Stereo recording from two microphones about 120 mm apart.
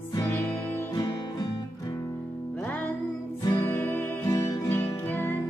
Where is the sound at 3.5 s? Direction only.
15° left (ahead or behind).